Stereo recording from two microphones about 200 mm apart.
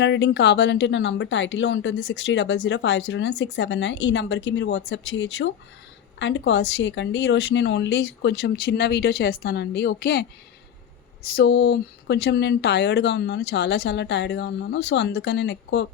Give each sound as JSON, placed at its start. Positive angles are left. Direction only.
{"t": 0.0, "sound": "speech", "side_deg": 60}
{"t": 11.3, "sound": "speech", "side_deg": 60}